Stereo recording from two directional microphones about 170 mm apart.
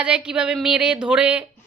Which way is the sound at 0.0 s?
5° right (ahead or behind).